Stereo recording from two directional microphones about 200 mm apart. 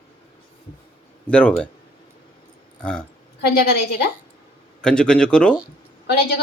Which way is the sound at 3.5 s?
50° left (ahead or behind).